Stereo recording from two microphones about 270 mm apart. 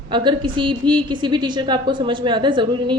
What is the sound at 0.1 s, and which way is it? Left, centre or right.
A woman's voice, centre.